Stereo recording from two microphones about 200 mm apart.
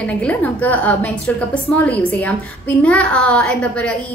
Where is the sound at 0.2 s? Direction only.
10° left (ahead or behind).